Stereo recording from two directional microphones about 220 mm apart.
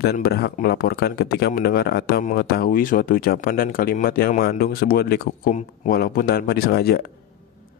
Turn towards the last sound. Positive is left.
turn(degrees=45)  # may be behind; listen again after turning